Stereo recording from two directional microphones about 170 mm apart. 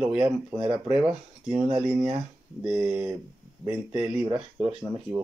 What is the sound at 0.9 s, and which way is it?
Speech, 5° right (ahead or behind).